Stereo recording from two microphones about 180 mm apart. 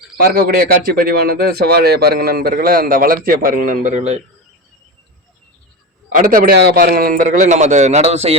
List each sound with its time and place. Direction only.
0.2 s a man's voice: 55° right (ahead or behind); by 4.2 s 40° right (ahead or behind)
6.1 s a man's voice: 50° right (ahead or behind)